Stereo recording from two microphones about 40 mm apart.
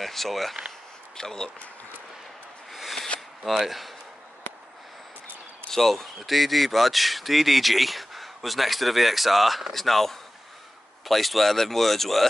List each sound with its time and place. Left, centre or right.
0.0 s speech: centre
1.1 s speech: centre
2.7 s a sound: centre
3.5 s speech: centre
5.7 s speech: centre